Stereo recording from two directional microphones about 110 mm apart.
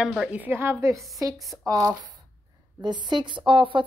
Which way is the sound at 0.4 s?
20° right (ahead or behind).